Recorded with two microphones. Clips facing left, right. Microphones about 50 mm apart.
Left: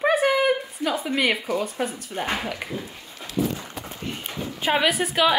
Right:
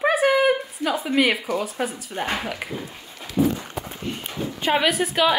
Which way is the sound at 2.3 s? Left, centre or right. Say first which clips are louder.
Right 1 dB; centre.